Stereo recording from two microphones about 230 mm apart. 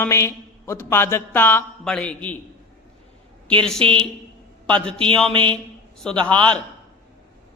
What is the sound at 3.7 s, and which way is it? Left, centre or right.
Speech, right.